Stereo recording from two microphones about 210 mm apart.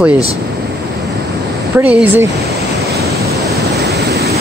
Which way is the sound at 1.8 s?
5° right (ahead or behind).